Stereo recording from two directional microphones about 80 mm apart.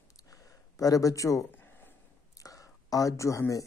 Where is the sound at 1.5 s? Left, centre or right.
Left.